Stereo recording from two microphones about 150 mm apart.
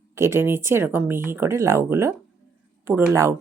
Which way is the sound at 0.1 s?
15° right (ahead or behind).